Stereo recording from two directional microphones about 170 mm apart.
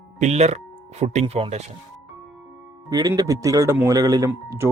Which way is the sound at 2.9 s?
20° right (ahead or behind).